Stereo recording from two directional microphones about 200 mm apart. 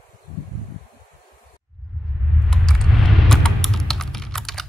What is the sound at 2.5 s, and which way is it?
Typing, centre (ahead or behind).